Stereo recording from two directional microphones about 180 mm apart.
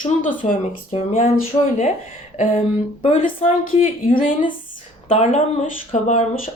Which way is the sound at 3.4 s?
35° left (ahead or behind).